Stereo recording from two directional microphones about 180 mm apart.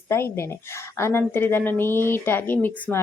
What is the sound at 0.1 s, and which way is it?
Speech, 15° left (ahead or behind).